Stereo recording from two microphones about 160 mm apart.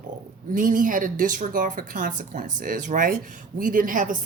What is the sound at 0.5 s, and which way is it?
A woman's voice, 55° right (ahead or behind).